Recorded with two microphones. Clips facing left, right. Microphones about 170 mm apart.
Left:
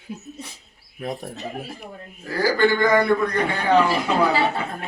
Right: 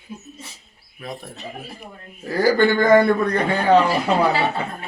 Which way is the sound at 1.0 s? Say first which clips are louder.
Left 4 dB; 50° left (ahead or behind).